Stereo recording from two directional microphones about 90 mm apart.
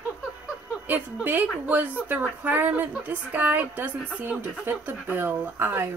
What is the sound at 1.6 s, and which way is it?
A woman's voice, 20° right (ahead or behind).